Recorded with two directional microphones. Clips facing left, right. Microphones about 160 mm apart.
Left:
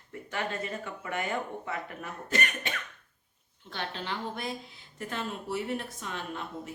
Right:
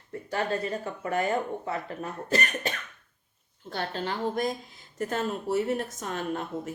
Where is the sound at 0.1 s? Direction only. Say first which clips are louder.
Right 5 dB; 35° right (ahead or behind).